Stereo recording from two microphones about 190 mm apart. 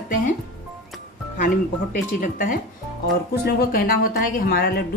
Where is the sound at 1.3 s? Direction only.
45° left (ahead or behind).